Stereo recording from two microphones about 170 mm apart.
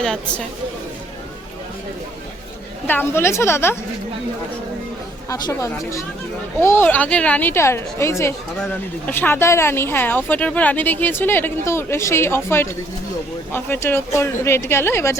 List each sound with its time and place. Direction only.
0.0 s speech: 5° left (ahead or behind)
2.8 s speech: 10° left (ahead or behind)
5.3 s speech: 20° left (ahead or behind)